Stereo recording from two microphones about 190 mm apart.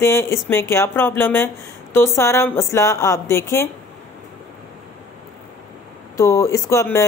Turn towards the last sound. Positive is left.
turn(degrees=15)  # may be behind; listen again after turning